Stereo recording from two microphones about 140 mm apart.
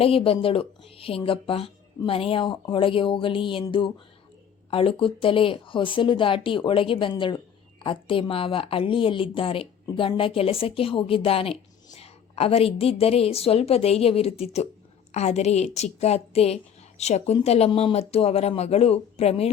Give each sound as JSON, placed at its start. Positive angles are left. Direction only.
{"t": 0.0, "sound": "a woman's voice", "side_deg": 40}